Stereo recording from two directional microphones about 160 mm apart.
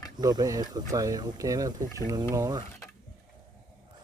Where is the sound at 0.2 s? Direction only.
25° right (ahead or behind).